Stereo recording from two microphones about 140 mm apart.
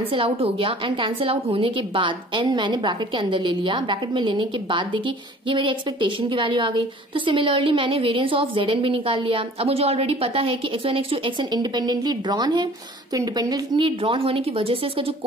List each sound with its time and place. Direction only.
0.1 s a woman's voice: 40° right (ahead or behind)